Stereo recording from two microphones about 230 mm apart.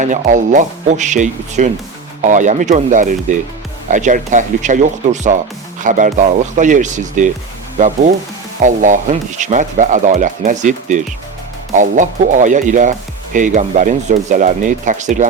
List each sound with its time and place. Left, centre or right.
0.0 s speech: right